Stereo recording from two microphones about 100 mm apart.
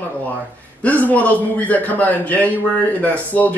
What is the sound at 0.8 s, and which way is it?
A man's voice, 15° left (ahead or behind).